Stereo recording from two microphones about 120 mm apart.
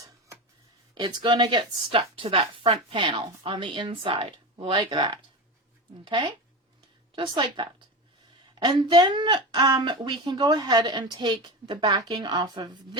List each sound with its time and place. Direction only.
0.9 s a woman's voice: 40° right (ahead or behind)